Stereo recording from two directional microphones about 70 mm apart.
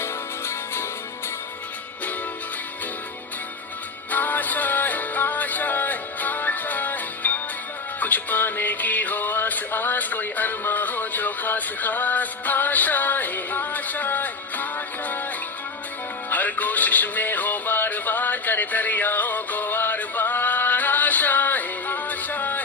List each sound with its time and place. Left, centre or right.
0.0 s music: left
4.1 s music: left
16.3 s music: left